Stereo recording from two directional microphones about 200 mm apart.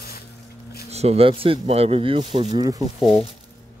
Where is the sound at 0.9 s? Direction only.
30° right (ahead or behind).